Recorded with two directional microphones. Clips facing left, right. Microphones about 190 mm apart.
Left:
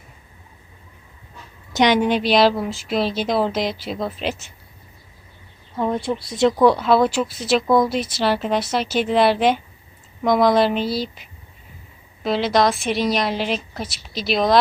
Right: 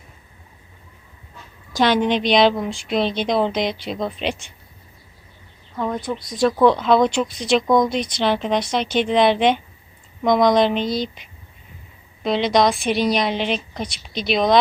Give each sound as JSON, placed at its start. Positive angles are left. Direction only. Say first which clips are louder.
{"t": 1.7, "sound": "speech", "louder": "left 1 dB", "side_deg": 15}
{"t": 6.1, "sound": "speech", "louder": "even", "side_deg": 25}
{"t": 6.6, "sound": "speech", "louder": "right 1 dB", "side_deg": 10}